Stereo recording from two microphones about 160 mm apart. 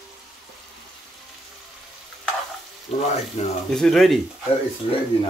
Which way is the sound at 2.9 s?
40° left (ahead or behind).